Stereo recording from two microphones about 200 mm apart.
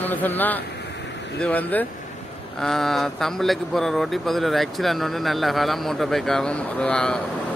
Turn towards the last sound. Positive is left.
turn(degrees=5)  # may be behind; listen again after turning